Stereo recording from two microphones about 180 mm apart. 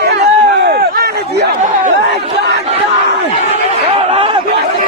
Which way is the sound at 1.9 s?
70° right (ahead or behind).